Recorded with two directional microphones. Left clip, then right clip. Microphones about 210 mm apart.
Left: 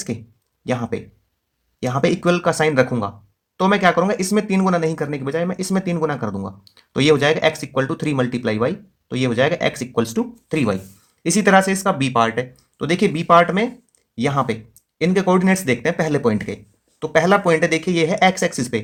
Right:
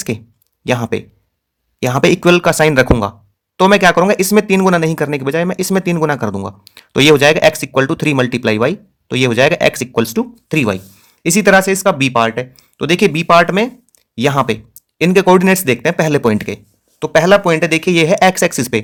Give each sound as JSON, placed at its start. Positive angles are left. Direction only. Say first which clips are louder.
{"t": 0.6, "sound": "speech", "louder": "right 7 dB", "side_deg": -35}